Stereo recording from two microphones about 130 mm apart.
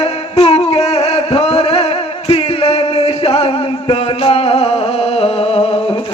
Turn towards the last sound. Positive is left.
turn(degrees=50)  # may be behind; listen again after turning